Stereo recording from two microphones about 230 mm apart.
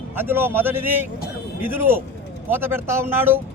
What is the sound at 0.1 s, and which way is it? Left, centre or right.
Speech, centre.